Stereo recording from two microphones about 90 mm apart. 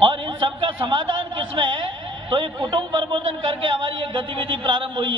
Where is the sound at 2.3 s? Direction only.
60° right (ahead or behind).